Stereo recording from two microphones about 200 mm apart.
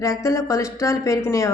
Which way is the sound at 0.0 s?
15° left (ahead or behind).